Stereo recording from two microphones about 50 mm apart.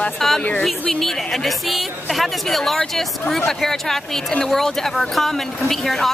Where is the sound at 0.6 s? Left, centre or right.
Centre.